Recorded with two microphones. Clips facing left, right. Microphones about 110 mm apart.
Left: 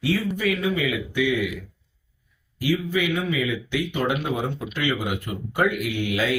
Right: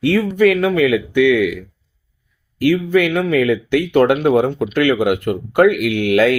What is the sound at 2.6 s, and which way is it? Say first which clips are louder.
Speech: right 9 dB; 60° right (ahead or behind).